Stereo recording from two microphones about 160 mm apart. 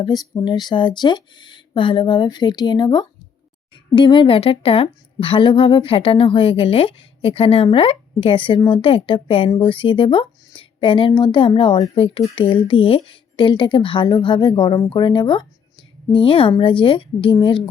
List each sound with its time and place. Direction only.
0.0 s a woman's voice: 25° left (ahead or behind)